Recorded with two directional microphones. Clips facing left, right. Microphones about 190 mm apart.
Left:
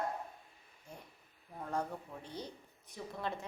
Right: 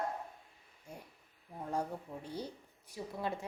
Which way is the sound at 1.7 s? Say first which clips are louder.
Right 1 dB; 10° right (ahead or behind).